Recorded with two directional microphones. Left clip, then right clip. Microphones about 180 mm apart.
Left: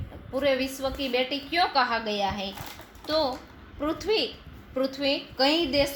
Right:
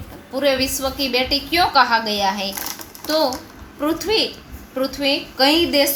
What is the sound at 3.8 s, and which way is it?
A woman's voice, 45° left (ahead or behind).